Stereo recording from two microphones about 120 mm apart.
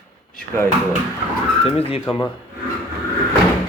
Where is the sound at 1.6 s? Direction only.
55° left (ahead or behind).